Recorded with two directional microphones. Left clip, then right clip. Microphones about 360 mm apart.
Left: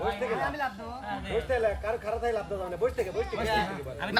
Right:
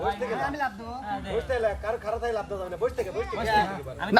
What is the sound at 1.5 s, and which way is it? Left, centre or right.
A man's voice, centre.